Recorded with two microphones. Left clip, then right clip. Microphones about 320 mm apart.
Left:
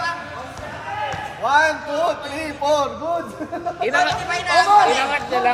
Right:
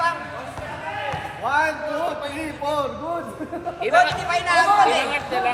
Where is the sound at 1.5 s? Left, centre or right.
Left.